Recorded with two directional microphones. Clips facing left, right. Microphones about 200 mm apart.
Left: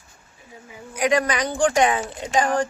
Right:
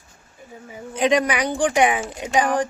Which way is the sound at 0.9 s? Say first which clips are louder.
Right 2 dB; 20° right (ahead or behind).